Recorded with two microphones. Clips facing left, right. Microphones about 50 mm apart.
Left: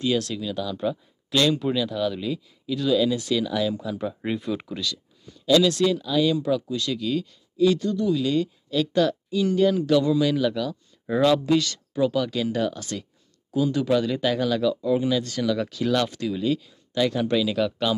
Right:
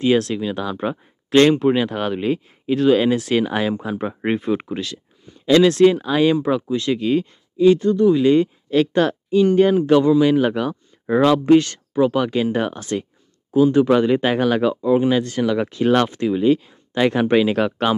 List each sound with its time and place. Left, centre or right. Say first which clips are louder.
0.0 s speech: right 7 dB; right